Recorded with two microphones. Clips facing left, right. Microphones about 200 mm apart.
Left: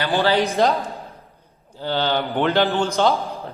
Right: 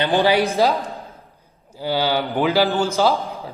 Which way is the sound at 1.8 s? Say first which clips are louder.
Right 1 dB; 10° right (ahead or behind).